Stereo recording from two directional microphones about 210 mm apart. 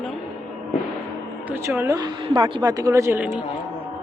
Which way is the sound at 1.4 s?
10° right (ahead or behind).